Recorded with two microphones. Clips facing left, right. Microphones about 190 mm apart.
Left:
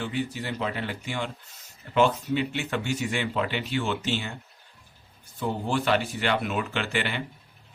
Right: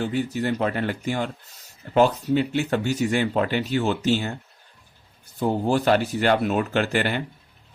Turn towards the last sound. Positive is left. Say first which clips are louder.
# right 6 dB
turn(degrees=-45)  # may be behind; listen again after turning